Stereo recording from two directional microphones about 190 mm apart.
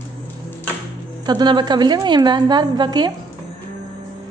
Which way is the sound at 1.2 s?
25° right (ahead or behind).